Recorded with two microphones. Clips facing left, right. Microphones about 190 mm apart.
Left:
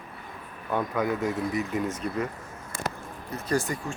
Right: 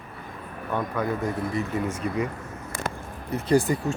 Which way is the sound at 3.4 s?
30° right (ahead or behind).